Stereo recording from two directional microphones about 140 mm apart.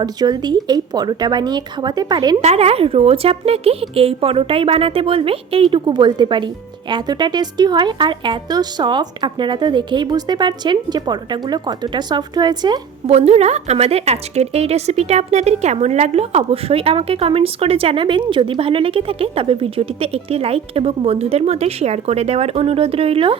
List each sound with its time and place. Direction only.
0.0 s speech: 30° right (ahead or behind)
2.4 s a woman's voice: 50° right (ahead or behind); by 12.8 s 30° right (ahead or behind)
13.1 s a woman's voice: 50° right (ahead or behind)